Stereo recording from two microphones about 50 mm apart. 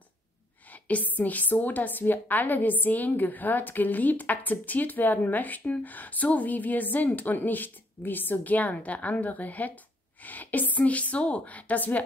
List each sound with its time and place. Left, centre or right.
0.8 s a woman's voice: left